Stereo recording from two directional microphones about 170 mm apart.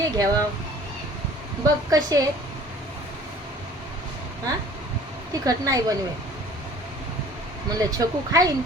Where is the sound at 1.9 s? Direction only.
20° right (ahead or behind).